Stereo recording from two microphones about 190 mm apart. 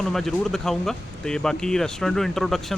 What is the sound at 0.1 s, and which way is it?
Speech, centre (ahead or behind).